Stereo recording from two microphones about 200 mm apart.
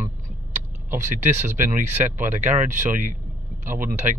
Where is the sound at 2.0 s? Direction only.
40° right (ahead or behind).